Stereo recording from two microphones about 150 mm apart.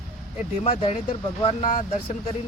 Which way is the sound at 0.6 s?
45° left (ahead or behind).